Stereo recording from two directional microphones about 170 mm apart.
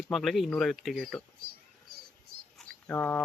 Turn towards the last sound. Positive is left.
turn(degrees=10)  # may be behind; listen again after turning